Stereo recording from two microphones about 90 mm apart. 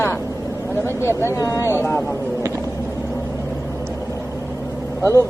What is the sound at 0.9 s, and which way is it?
Speech, 30° left (ahead or behind).